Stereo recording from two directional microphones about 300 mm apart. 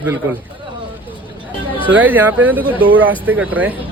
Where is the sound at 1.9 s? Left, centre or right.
Centre.